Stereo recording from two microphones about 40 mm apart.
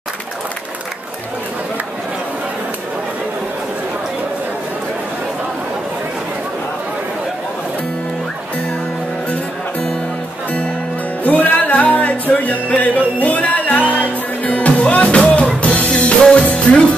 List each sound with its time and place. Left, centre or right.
11.2 s music: left
16.2 s music: centre